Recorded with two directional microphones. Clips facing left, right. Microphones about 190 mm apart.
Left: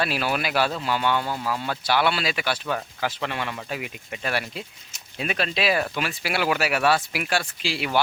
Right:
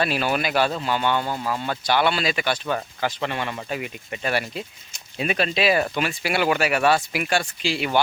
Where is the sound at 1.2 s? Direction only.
15° right (ahead or behind).